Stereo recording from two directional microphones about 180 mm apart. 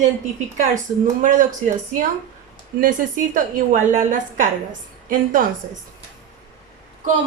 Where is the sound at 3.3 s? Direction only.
45° right (ahead or behind).